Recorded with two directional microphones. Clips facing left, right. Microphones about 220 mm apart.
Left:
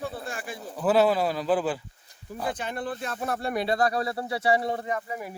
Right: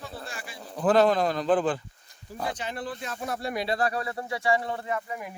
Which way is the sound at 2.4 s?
55° left (ahead or behind).